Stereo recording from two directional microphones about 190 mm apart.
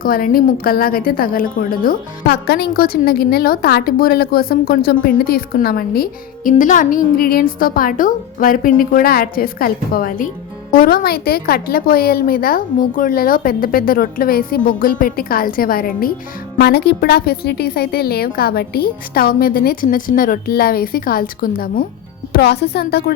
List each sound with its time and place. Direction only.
0.0 s a woman's voice: 50° left (ahead or behind)
22.3 s a woman's voice: 60° left (ahead or behind)